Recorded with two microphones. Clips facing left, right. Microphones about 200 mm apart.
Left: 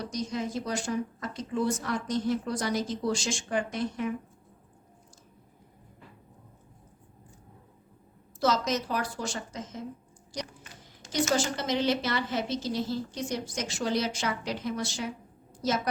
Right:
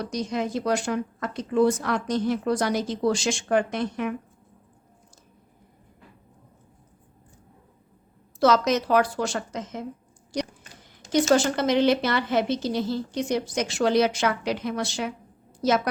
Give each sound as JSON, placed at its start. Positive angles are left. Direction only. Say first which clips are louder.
{"t": 0.1, "sound": "a woman's voice", "louder": "right 5 dB", "side_deg": -70}
{"t": 8.4, "sound": "a woman's voice", "louder": "right 7 dB", "side_deg": -70}
{"t": 11.1, "sound": "a woman's voice", "louder": "right 7 dB", "side_deg": -60}